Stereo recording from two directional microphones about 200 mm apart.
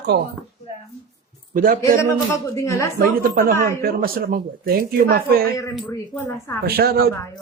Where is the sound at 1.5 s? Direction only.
45° right (ahead or behind).